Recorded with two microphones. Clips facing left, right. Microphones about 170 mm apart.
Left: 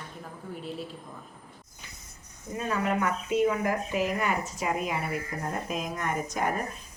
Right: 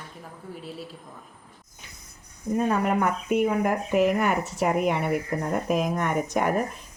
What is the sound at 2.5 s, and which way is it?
Speech, 60° right (ahead or behind).